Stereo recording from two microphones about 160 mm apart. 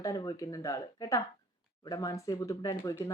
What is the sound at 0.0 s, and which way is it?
A woman's voice, 20° left (ahead or behind).